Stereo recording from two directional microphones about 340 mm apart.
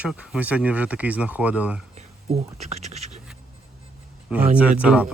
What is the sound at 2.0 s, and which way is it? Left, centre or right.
Speech, centre.